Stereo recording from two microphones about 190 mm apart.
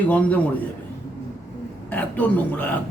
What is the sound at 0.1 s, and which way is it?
Speech, 5° left (ahead or behind).